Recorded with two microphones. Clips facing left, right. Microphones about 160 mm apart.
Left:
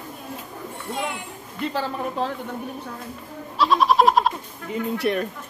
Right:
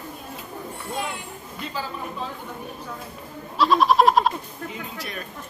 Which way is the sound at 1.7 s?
75° left (ahead or behind).